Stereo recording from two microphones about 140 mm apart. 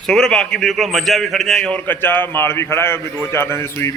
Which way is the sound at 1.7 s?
15° left (ahead or behind).